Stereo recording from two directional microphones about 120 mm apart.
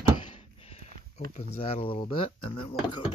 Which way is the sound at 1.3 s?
55° left (ahead or behind).